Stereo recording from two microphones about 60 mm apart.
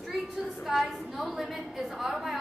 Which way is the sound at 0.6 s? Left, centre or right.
Centre.